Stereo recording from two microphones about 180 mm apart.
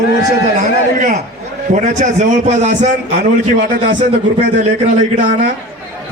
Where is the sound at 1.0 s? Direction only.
40° right (ahead or behind).